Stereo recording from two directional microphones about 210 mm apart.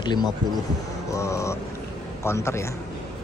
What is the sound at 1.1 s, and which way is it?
Speech, 15° left (ahead or behind).